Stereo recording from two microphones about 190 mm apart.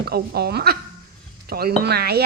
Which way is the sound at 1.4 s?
55° right (ahead or behind).